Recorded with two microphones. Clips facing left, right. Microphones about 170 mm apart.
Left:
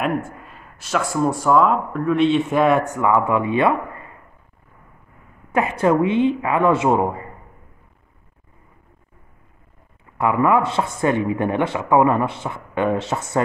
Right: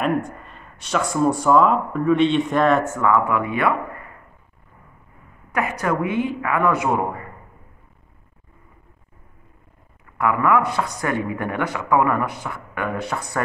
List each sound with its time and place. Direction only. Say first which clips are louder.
0.0 s speech: right 1 dB; 5° left (ahead or behind); by 4.1 s 25° left (ahead or behind)
5.5 s speech: left 5 dB; 25° left (ahead or behind)
10.1 s speech: left 2 dB; 25° left (ahead or behind)